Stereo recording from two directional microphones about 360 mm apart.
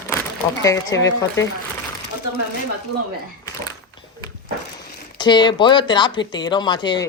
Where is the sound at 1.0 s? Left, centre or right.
Left.